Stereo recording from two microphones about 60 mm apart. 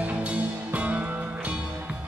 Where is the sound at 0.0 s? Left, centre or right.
Right.